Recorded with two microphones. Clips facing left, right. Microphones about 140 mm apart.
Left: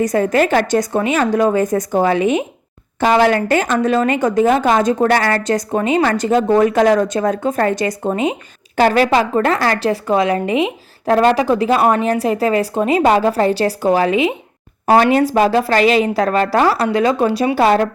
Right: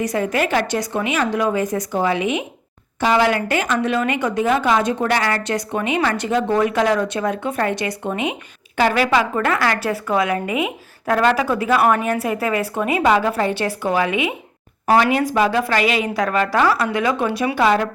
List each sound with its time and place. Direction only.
0.0 s a woman's voice: 45° left (ahead or behind)